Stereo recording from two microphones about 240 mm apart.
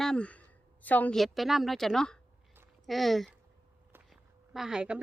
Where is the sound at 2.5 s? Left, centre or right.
Centre.